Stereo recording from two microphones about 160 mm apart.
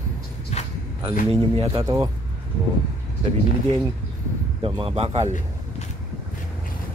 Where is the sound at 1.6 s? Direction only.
35° right (ahead or behind).